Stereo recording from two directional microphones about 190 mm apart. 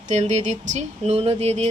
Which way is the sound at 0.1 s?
35° right (ahead or behind).